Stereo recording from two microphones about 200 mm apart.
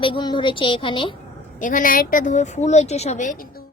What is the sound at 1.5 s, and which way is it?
Speech, 40° left (ahead or behind).